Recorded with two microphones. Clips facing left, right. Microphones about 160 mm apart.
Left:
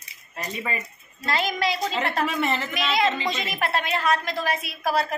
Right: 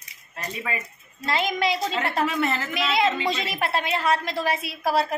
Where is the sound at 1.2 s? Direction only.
20° right (ahead or behind).